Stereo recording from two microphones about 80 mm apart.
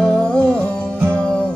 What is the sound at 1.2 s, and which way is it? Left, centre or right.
Music, centre.